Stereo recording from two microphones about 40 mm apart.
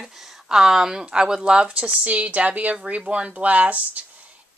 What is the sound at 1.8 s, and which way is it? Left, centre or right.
Speech, right.